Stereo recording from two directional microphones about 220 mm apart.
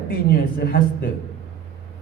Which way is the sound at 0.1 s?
45° left (ahead or behind).